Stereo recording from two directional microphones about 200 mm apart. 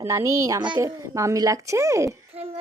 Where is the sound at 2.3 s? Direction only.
30° right (ahead or behind).